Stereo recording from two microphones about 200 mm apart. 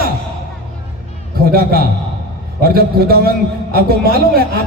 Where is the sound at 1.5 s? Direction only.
50° right (ahead or behind).